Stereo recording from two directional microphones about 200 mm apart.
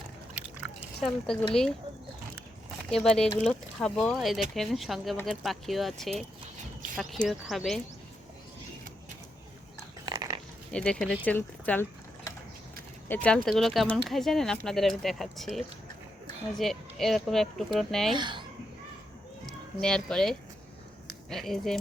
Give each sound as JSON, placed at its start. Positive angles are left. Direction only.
{"t": 1.0, "sound": "speech", "side_deg": 5}
{"t": 2.9, "sound": "speech", "side_deg": 0}
{"t": 10.1, "sound": "pig", "side_deg": -20}
{"t": 10.7, "sound": "speech", "side_deg": 5}
{"t": 11.3, "sound": "a sound", "side_deg": 5}
{"t": 13.1, "sound": "speech", "side_deg": 5}
{"t": 18.1, "sound": "speech", "side_deg": -25}
{"t": 19.5, "sound": "a child's voice", "side_deg": 5}